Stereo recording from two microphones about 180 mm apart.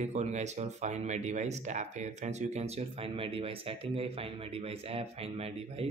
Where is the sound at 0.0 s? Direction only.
40° right (ahead or behind).